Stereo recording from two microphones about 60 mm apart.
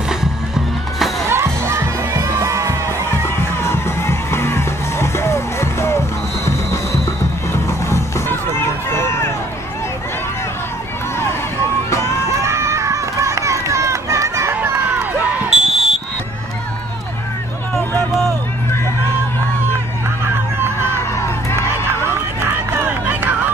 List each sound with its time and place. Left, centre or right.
1.3 s crowd: right
2.2 s music: right
3.1 s music: left
12.3 s run: right
14.5 s crowd: right
15.5 s basketball bounce: centre
22.0 s a sound: right